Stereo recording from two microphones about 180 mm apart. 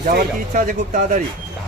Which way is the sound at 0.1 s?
45° right (ahead or behind).